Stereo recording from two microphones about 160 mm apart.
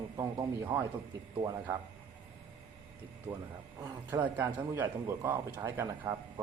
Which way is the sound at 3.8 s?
15° right (ahead or behind).